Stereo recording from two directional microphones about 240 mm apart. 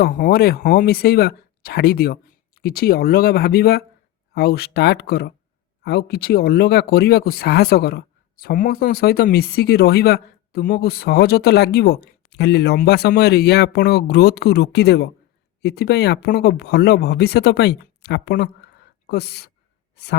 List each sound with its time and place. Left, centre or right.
0.0 s speech: left